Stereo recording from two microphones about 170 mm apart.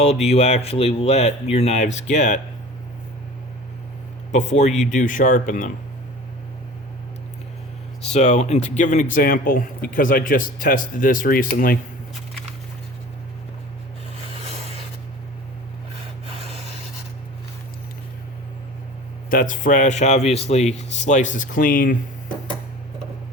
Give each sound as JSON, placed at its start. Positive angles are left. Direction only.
{"t": 0.0, "sound": "speech", "side_deg": 40}
{"t": 4.3, "sound": "speech", "side_deg": 40}
{"t": 8.1, "sound": "speech", "side_deg": 40}
{"t": 14.4, "sound": "rub", "side_deg": -40}
{"t": 19.3, "sound": "speech", "side_deg": 50}